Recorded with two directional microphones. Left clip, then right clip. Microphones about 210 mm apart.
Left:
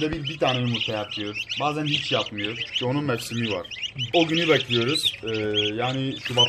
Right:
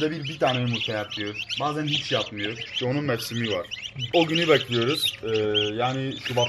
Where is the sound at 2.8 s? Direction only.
5° left (ahead or behind).